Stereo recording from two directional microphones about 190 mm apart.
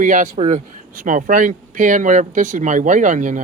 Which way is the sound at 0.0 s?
40° right (ahead or behind).